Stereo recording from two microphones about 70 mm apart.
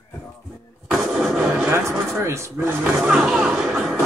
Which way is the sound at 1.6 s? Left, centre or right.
Right.